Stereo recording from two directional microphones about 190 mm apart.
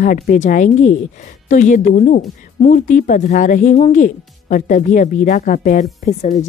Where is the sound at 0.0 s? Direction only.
45° left (ahead or behind).